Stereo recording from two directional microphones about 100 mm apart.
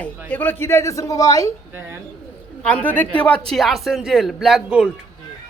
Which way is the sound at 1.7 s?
25° right (ahead or behind).